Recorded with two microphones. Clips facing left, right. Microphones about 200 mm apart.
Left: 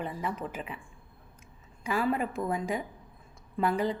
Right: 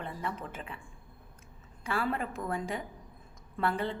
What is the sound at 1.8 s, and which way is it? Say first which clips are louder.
A woman's voice: left 4 dB; 15° left (ahead or behind).